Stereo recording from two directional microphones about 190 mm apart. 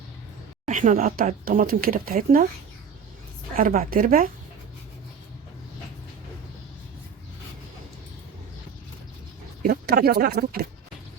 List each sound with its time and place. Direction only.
0.6 s speech: 40° right (ahead or behind)
3.5 s speech: 45° right (ahead or behind)
9.6 s speech: 55° right (ahead or behind)